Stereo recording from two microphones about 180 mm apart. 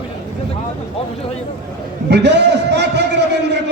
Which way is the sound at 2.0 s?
70° right (ahead or behind).